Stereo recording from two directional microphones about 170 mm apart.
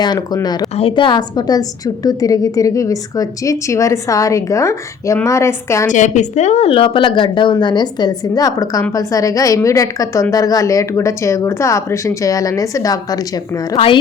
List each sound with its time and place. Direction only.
0.8 s a woman's voice: 30° left (ahead or behind)
5.9 s a woman's voice: 45° left (ahead or behind); by 13.1 s 20° left (ahead or behind)
13.7 s a woman's voice: 30° left (ahead or behind)